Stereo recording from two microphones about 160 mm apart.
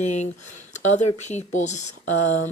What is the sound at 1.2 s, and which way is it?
Speech, 45° left (ahead or behind).